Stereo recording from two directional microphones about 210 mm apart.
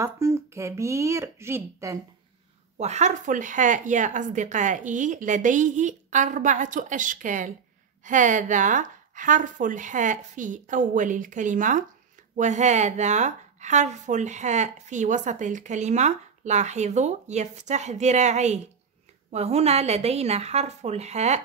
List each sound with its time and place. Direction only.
0.0 s speech: 15° right (ahead or behind)
2.8 s speech: 35° right (ahead or behind)